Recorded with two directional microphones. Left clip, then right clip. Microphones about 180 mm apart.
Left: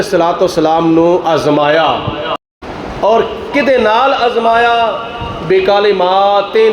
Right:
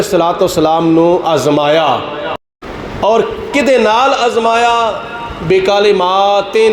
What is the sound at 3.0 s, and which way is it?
A man's voice, 35° right (ahead or behind).